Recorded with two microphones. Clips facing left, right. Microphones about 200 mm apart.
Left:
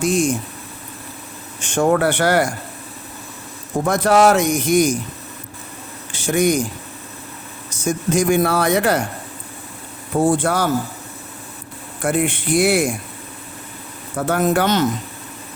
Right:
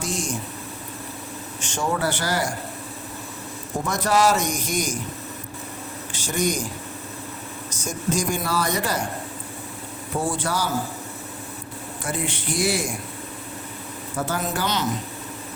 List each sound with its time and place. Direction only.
0.0 s speech: 55° left (ahead or behind)
1.6 s speech: 55° left (ahead or behind)
3.8 s speech: 55° left (ahead or behind)
6.2 s speech: 60° left (ahead or behind)
7.9 s speech: 60° left (ahead or behind)
10.2 s speech: 55° left (ahead or behind)
12.0 s speech: 55° left (ahead or behind)
14.2 s speech: 60° left (ahead or behind)